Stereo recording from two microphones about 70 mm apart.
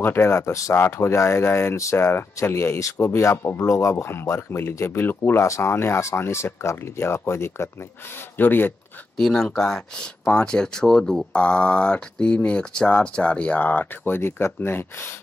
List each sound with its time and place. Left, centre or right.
0.0 s speech: left
0.7 s speech: left
3.9 s speech: left
9.1 s speech: centre; by 15.1 s left